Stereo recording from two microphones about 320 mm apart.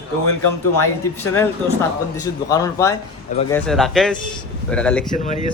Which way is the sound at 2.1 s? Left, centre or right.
Centre.